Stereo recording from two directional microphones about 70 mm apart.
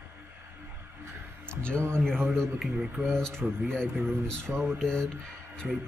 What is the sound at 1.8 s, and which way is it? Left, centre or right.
Speech, right.